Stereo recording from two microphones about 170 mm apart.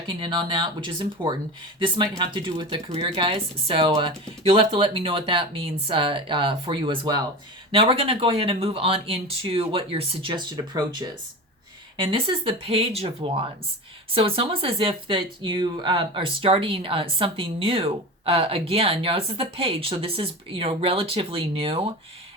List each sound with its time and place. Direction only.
0.1 s speech: 25° right (ahead or behind)